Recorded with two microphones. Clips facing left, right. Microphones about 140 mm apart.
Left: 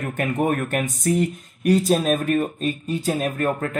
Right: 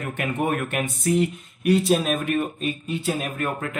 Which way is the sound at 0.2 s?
40° left (ahead or behind).